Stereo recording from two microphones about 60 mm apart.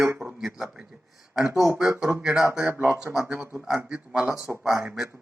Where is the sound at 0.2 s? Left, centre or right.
Centre.